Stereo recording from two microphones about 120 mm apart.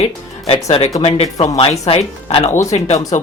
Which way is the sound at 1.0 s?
55° left (ahead or behind).